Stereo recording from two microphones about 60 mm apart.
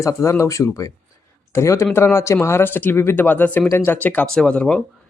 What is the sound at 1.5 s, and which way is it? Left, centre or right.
Speech, left.